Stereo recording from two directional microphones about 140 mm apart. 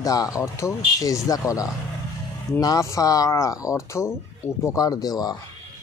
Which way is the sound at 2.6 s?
25° left (ahead or behind).